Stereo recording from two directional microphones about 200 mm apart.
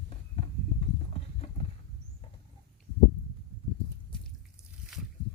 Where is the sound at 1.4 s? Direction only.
30° left (ahead or behind).